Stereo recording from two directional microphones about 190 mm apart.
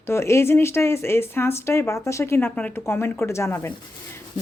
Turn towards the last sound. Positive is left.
turn(degrees=10)  # may be behind; listen again after turning